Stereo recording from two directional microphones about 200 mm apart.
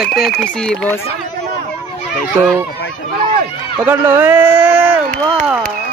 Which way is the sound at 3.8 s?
10° right (ahead or behind).